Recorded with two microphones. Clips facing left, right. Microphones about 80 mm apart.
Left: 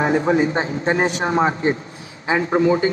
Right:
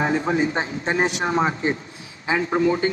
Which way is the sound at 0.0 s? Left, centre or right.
Left.